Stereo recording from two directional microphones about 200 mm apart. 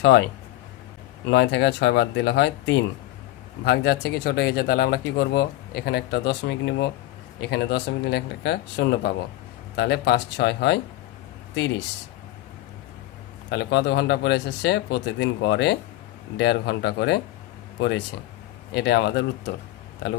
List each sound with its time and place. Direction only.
0.0 s speech: 60° left (ahead or behind)
1.3 s speech: 60° left (ahead or behind)
13.5 s speech: 55° left (ahead or behind)